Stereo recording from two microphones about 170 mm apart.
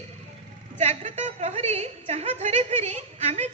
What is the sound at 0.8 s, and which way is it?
A woman's voice, 40° right (ahead or behind).